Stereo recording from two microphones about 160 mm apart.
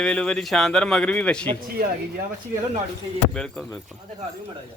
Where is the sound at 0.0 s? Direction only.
5° left (ahead or behind).